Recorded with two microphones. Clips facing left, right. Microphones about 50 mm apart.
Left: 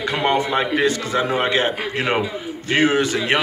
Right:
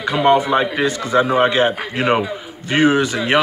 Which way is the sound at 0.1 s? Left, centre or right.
Centre.